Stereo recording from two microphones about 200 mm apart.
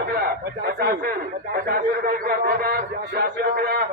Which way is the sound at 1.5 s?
45° right (ahead or behind).